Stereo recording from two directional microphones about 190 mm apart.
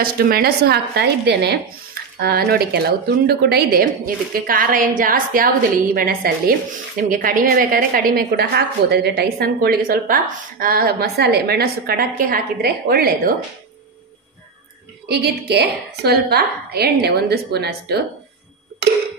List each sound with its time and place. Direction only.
0.0 s a woman's voice: 55° right (ahead or behind)
15.0 s a woman's voice: 60° right (ahead or behind)